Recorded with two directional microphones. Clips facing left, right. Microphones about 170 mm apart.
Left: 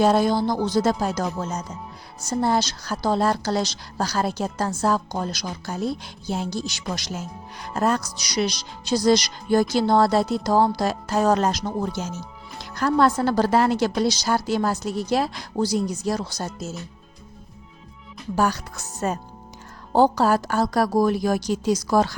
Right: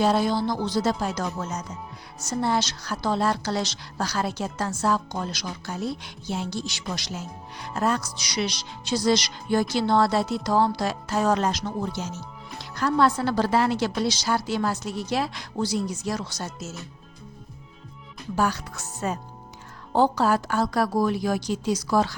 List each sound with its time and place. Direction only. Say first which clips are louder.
0.0 s a woman's voice: left 3 dB; 45° left (ahead or behind)
18.3 s a woman's voice: left 2 dB; 40° left (ahead or behind)